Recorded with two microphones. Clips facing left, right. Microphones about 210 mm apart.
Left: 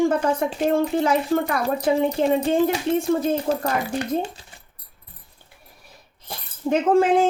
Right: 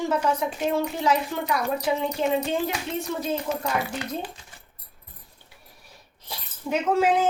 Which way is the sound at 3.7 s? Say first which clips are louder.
Left 5 dB; 35° left (ahead or behind).